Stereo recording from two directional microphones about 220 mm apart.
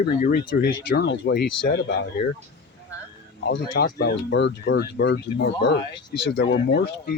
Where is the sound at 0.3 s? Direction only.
45° left (ahead or behind).